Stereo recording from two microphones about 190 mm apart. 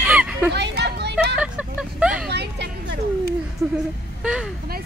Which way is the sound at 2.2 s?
60° right (ahead or behind).